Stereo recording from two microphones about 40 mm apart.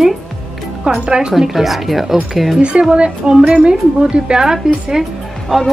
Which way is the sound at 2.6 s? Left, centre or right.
Right.